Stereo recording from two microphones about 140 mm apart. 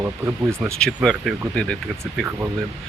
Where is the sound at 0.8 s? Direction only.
5° left (ahead or behind).